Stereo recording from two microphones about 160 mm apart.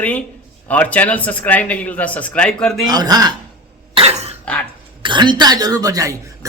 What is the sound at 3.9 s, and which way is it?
Cough, 40° right (ahead or behind).